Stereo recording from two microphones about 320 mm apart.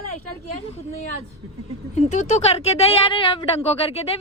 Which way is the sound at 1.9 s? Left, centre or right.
Left.